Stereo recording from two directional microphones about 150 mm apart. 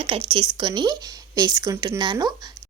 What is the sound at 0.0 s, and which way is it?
Speech, 35° right (ahead or behind).